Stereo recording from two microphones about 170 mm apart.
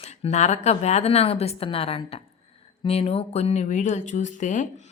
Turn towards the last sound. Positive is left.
turn(degrees=45)  # may be behind; listen again after turning